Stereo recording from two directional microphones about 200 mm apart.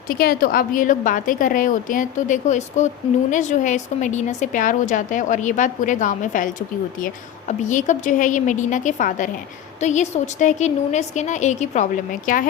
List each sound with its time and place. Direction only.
0.1 s a woman's voice: 45° left (ahead or behind)